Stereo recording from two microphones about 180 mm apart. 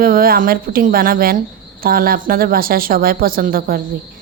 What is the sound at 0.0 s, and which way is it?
A woman's voice, 55° right (ahead or behind).